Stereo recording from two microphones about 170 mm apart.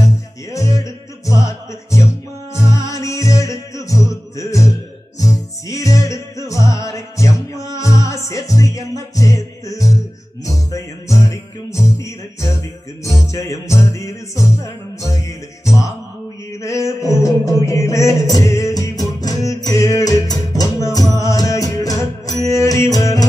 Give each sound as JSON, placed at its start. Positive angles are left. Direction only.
{"t": 0.5, "sound": "music", "side_deg": 20}
{"t": 12.0, "sound": "music", "side_deg": 15}
{"t": 16.6, "sound": "music", "side_deg": 20}